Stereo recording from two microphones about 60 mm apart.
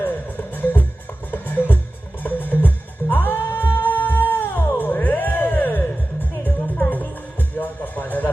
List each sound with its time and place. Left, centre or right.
0.0 s music: left